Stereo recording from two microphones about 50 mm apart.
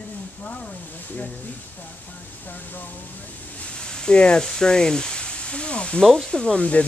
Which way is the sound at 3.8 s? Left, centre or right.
Centre.